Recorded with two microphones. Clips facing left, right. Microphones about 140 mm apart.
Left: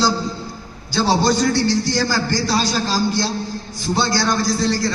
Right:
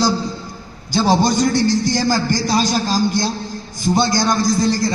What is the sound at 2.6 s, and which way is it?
Speech, 50° right (ahead or behind).